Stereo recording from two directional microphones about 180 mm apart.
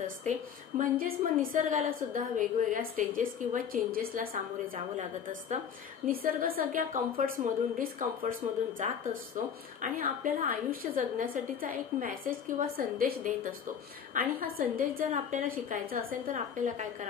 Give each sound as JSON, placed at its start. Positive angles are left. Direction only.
{"t": 0.0, "sound": "a woman's voice", "side_deg": -45}
{"t": 6.0, "sound": "a woman's voice", "side_deg": -55}